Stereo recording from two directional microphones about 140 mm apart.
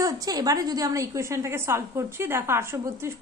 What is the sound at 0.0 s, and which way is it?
A woman's voice, 25° right (ahead or behind).